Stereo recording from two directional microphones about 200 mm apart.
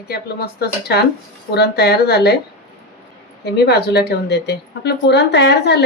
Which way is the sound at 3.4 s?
55° left (ahead or behind).